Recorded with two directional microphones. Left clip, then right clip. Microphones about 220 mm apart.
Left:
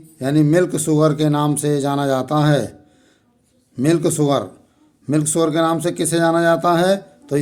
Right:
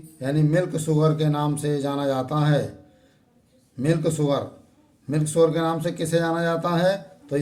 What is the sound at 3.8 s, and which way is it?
A man's voice, 55° left (ahead or behind).